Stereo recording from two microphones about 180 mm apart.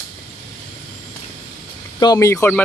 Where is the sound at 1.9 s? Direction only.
20° left (ahead or behind).